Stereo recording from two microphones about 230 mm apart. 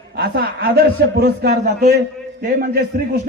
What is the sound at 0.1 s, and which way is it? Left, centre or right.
A man's voice, right.